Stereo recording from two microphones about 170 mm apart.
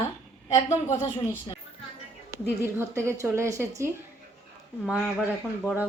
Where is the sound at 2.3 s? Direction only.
15° right (ahead or behind).